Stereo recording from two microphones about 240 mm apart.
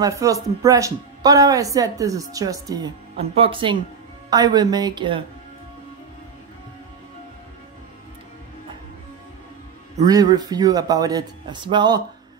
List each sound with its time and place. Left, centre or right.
0.0 s speech: centre
10.0 s speech: centre